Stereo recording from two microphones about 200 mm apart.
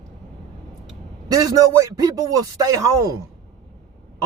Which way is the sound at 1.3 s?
20° right (ahead or behind).